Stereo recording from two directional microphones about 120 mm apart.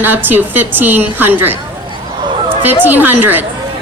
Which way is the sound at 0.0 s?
15° right (ahead or behind).